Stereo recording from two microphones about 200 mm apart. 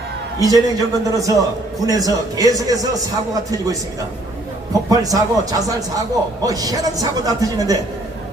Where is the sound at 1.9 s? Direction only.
20° right (ahead or behind).